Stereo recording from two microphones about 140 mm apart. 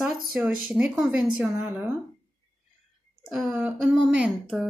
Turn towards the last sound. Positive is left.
turn(degrees=-5)  # may be behind; listen again after turning